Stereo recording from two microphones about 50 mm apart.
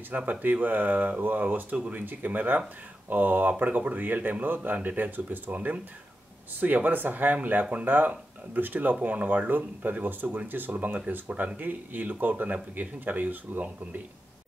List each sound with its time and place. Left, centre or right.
0.1 s speech: right